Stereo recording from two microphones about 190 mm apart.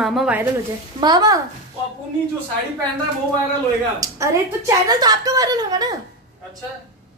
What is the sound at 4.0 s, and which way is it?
A woman's voice, 15° right (ahead or behind).